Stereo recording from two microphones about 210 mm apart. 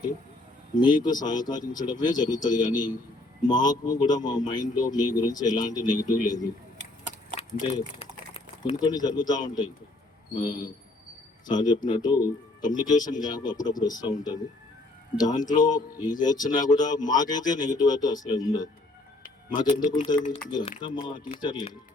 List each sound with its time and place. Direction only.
0.8 s a man's voice: 20° left (ahead or behind)
7.3 s a sound: 30° left (ahead or behind)
8.8 s a man's voice: 20° left (ahead or behind)
20.2 s speech: 35° left (ahead or behind)
20.5 s a man's voice: 20° left (ahead or behind)